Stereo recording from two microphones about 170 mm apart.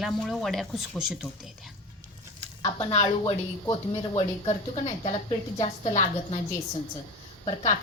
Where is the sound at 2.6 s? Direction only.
40° left (ahead or behind).